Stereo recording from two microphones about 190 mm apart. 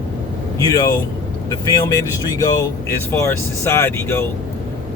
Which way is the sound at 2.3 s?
20° left (ahead or behind).